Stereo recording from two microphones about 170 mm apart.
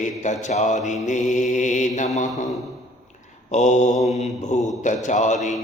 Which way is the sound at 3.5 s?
45° left (ahead or behind).